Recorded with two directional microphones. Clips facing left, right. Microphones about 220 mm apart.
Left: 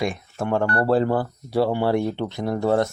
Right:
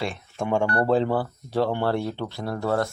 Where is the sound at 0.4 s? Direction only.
Centre (ahead or behind).